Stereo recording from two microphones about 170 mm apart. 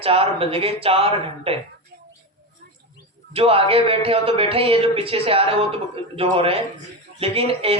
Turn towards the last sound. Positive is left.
turn(degrees=-35)  # may be behind; listen again after turning